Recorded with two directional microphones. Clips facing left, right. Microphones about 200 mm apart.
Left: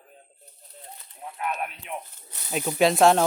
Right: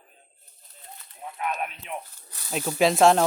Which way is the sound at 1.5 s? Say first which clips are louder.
Even; centre (ahead or behind).